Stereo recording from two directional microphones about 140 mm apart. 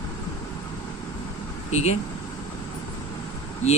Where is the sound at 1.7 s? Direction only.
50° left (ahead or behind).